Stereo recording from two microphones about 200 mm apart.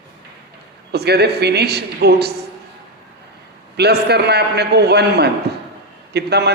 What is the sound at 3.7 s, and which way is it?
A man's voice, 55° right (ahead or behind).